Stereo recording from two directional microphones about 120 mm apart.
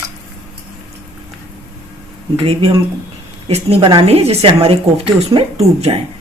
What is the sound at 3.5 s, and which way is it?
A woman's voice, 60° right (ahead or behind).